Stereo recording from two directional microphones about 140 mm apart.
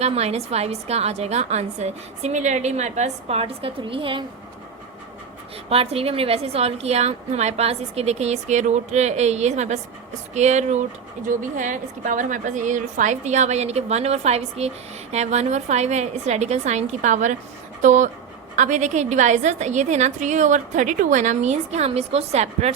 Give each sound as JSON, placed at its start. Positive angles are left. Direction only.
{"t": 0.0, "sound": "a woman's voice", "side_deg": -50}
{"t": 5.6, "sound": "a woman's voice", "side_deg": -45}
{"t": 11.3, "sound": "a woman's voice", "side_deg": -65}